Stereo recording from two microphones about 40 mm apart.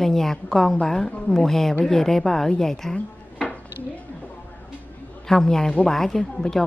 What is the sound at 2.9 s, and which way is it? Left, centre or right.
Dishes, left.